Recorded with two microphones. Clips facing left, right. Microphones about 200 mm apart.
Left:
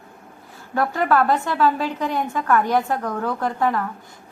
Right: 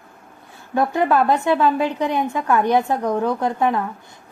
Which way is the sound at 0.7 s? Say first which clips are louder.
Right 2 dB; 20° right (ahead or behind).